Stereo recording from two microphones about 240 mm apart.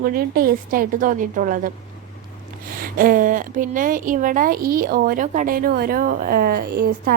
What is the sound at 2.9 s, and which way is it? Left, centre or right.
Speech, right.